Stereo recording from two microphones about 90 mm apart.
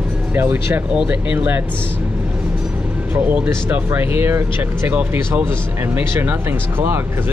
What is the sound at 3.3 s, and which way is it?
Speech, 20° right (ahead or behind).